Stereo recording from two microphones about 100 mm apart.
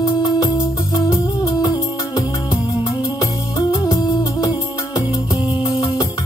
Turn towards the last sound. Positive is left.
turn(degrees=45)  # may be behind; listen again after turning